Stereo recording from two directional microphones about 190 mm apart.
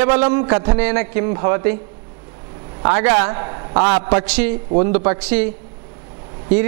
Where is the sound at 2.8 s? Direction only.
15° right (ahead or behind).